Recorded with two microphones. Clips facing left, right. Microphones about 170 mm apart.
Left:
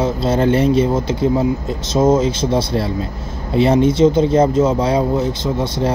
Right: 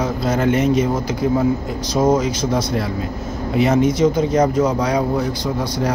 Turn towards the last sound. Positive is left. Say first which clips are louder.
# left 2 dB
turn(degrees=25)  # may be behind; listen again after turning